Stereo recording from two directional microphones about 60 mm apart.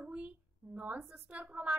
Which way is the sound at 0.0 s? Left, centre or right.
Centre.